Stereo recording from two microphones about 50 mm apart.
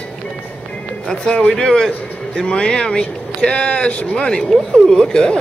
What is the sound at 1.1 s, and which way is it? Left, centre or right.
Speech, centre.